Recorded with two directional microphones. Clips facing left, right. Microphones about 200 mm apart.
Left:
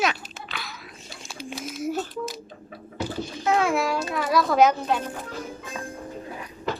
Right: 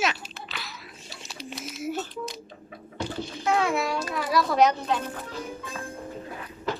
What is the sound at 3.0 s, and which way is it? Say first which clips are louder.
Babbling: left 2 dB; centre (ahead or behind).